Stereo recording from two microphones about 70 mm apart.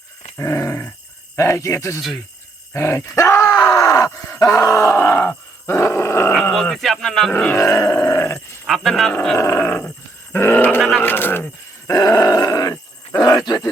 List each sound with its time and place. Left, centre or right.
0.3 s dog: left
1.4 s speech: left
2.7 s groan: left
4.9 s dog: left
6.5 s speech: centre
7.3 s speech: centre
7.6 s speech: left
8.6 s speech: centre
9.6 s speech: left
10.3 s grunt: left
10.8 s speech: centre
11.0 s speech: left
11.9 s grunt: left